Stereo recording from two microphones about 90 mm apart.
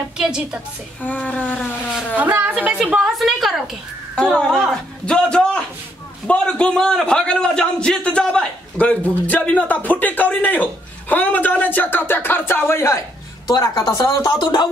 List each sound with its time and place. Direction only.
0.2 s a woman's voice: 10° right (ahead or behind)
1.0 s a man's voice: 15° left (ahead or behind)
2.1 s a woman's voice: 15° right (ahead or behind)
3.0 s a woman's voice: centre (ahead or behind); by 13.0 s 30° left (ahead or behind)
13.5 s a woman's voice: 40° left (ahead or behind)
14.2 s speech: 60° left (ahead or behind)